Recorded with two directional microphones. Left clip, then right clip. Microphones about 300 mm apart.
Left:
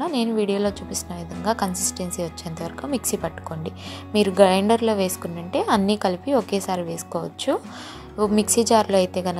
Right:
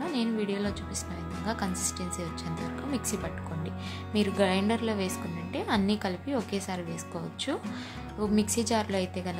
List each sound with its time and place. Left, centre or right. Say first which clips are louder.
0.0 s a woman's voice: left 8 dB; centre
3.6 s a woman's voice: left 5 dB; centre